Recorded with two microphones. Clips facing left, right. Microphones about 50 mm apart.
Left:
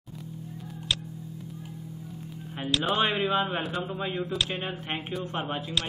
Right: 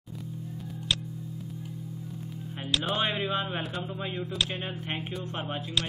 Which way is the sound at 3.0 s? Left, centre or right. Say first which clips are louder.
Left 4 dB; centre.